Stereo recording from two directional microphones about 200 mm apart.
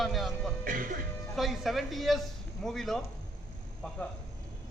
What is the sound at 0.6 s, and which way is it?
Music, 45° right (ahead or behind).